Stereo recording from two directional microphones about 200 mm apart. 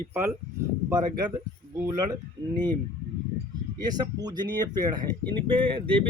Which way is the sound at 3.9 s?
20° right (ahead or behind).